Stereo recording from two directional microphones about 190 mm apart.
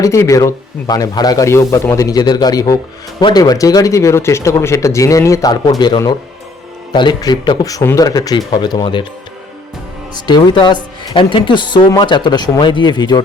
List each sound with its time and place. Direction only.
0.0 s speech: 15° left (ahead or behind)
10.2 s speech: 25° left (ahead or behind)